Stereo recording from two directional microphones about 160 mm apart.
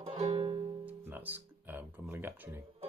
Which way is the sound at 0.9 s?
10° right (ahead or behind).